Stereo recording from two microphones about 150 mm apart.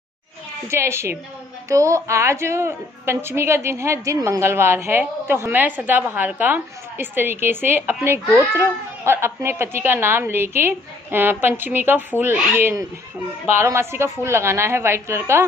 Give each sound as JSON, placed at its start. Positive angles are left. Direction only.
{"t": 0.7, "sound": "a woman's voice", "side_deg": -15}